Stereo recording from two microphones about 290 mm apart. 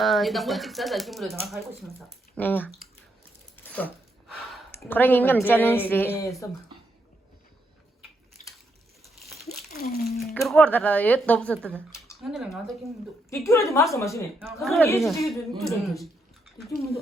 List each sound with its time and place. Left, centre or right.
0.0 s speech: centre
3.6 s a sound: centre
4.7 s speech: centre
9.2 s crumpling: centre
9.8 s speech: left
10.4 s speech: centre
13.3 s speech: centre
14.3 s speech: centre